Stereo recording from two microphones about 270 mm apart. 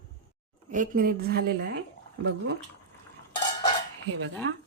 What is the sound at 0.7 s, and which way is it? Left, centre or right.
A woman's voice, right.